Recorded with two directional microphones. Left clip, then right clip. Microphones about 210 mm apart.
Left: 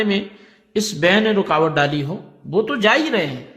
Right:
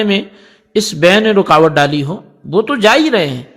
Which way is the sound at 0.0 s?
35° right (ahead or behind).